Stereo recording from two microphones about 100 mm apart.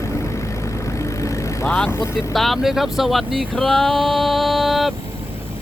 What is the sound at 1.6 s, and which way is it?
Vehicle, 10° left (ahead or behind).